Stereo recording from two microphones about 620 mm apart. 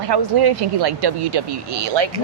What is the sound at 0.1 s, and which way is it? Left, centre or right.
Speech, right.